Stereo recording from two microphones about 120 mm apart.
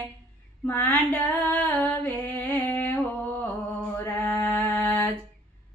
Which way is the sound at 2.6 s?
15° left (ahead or behind).